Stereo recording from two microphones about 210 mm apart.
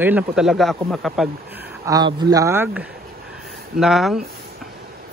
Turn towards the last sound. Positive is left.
turn(degrees=0)  # may be behind; listen again after turning